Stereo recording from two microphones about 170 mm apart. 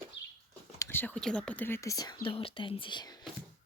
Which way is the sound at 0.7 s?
15° left (ahead or behind).